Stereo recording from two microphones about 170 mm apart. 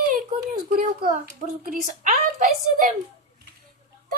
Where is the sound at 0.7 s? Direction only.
55° right (ahead or behind).